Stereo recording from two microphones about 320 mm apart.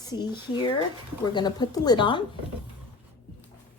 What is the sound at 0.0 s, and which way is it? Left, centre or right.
A woman's voice, centre.